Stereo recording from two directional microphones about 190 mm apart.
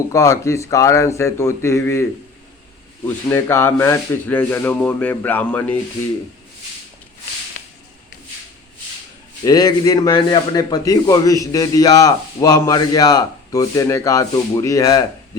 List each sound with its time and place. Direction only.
0.1 s speech: 15° left (ahead or behind)
3.2 s speech: 15° left (ahead or behind)
9.4 s speech: 20° left (ahead or behind)